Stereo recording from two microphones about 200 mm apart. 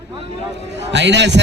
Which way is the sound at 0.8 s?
60° right (ahead or behind).